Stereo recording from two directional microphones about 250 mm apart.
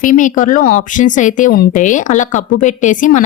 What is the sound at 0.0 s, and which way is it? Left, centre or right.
A woman's voice, left.